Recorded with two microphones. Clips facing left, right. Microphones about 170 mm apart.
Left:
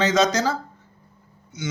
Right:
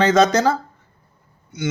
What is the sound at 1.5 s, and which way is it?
Speech, 60° right (ahead or behind).